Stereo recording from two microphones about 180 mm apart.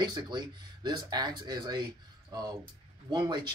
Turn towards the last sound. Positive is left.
turn(degrees=-25)  # may be behind; listen again after turning